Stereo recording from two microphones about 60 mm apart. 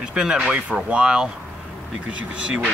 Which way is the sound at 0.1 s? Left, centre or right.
Centre.